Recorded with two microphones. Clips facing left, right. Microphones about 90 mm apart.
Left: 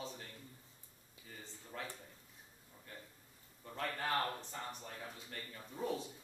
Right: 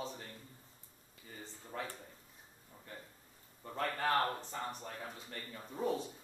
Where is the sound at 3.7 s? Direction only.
35° right (ahead or behind).